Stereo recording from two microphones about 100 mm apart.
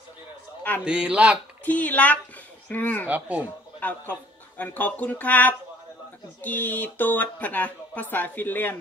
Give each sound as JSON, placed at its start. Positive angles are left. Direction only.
{"t": 0.7, "sound": "speech", "side_deg": -10}
{"t": 1.6, "sound": "speech", "side_deg": 15}
{"t": 3.1, "sound": "speech", "side_deg": -15}
{"t": 3.8, "sound": "speech", "side_deg": 15}